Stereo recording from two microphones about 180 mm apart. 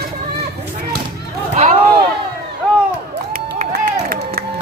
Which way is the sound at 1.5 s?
35° right (ahead or behind).